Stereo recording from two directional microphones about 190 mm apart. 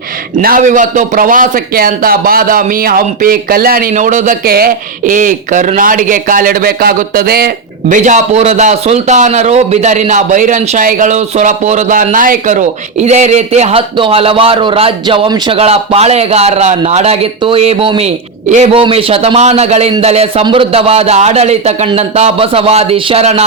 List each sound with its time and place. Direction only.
0.3 s a man's voice: 45° right (ahead or behind)